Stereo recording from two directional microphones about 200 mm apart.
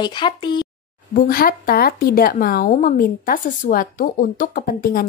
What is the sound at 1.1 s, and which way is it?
Speech, 45° left (ahead or behind).